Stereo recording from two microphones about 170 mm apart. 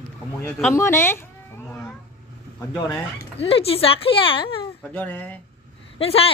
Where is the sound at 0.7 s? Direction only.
15° left (ahead or behind).